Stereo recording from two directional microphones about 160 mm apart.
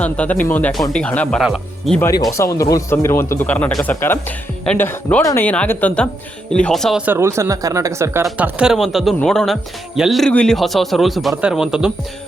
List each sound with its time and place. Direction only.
0.0 s speech: 10° left (ahead or behind)
2.0 s speech: 20° left (ahead or behind); by 7.0 s centre (ahead or behind)
7.0 s speech: 15° right (ahead or behind)
8.4 s speech: 5° right (ahead or behind)